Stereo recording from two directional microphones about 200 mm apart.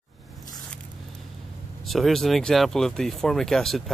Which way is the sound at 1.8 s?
Centre (ahead or behind).